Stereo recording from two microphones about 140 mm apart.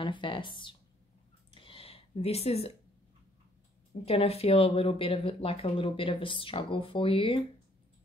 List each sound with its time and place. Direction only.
0.0 s speech: 35° left (ahead or behind)
1.5 s a sound: 40° left (ahead or behind)
4.0 s speech: 45° left (ahead or behind)